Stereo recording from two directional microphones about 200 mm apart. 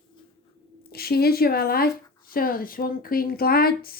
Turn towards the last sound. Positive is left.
turn(degrees=50)  # may be behind; listen again after turning